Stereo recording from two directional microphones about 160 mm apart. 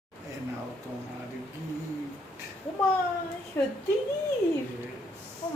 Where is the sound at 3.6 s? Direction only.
15° left (ahead or behind).